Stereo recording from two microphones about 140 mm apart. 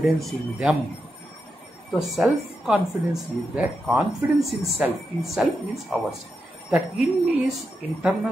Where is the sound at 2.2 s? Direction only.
5° right (ahead or behind).